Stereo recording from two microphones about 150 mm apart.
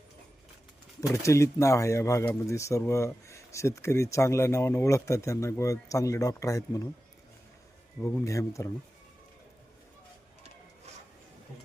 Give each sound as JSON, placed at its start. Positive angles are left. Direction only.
{"t": 1.0, "sound": "speech", "side_deg": 20}
{"t": 8.0, "sound": "speech", "side_deg": 20}